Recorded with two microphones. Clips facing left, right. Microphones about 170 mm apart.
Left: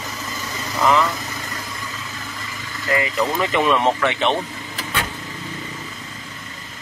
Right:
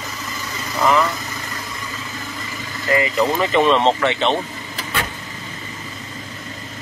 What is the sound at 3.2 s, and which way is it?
Speech, 20° right (ahead or behind).